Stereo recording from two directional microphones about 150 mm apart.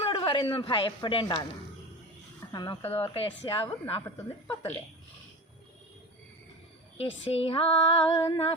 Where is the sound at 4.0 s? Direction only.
15° left (ahead or behind).